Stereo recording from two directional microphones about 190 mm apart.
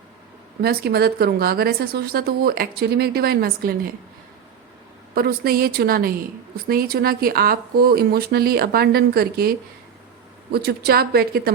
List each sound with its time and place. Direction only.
0.6 s speech: 55° right (ahead or behind)
5.1 s speech: 50° right (ahead or behind)